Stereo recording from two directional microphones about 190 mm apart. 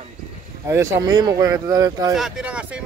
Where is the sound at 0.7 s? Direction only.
15° right (ahead or behind).